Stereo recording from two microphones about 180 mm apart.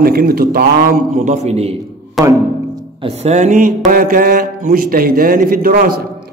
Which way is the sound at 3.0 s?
35° right (ahead or behind).